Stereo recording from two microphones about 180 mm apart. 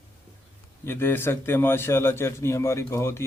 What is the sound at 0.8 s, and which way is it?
A man's voice, 15° left (ahead or behind).